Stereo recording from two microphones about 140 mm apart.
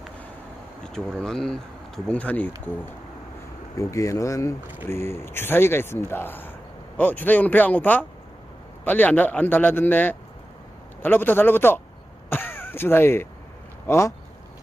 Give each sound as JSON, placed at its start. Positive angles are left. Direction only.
{"t": 0.9, "sound": "speech", "side_deg": 5}
{"t": 3.8, "sound": "speech", "side_deg": 25}